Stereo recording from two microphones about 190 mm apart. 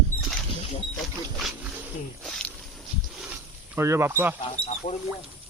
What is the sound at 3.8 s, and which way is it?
Speech, 15° right (ahead or behind).